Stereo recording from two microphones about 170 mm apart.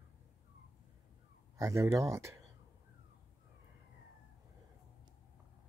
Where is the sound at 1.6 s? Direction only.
15° right (ahead or behind).